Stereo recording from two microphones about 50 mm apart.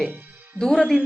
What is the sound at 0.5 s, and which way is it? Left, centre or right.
Speech, centre.